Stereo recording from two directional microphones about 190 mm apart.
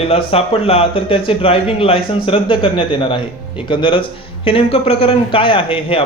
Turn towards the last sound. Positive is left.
turn(degrees=30)  # may be behind; listen again after turning